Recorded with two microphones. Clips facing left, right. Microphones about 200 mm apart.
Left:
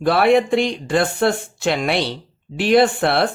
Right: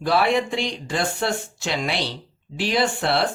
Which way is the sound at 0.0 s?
55° left (ahead or behind).